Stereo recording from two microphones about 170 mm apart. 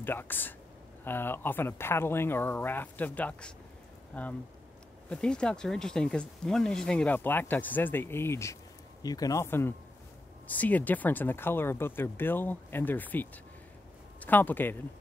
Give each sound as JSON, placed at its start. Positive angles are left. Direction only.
{"t": 0.0, "sound": "speech", "side_deg": 10}